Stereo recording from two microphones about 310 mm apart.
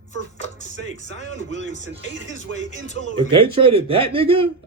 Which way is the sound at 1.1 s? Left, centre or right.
Right.